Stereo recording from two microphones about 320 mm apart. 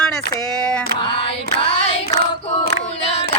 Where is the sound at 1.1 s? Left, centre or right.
Centre.